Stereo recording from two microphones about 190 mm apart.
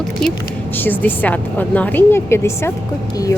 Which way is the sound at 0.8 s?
10° left (ahead or behind).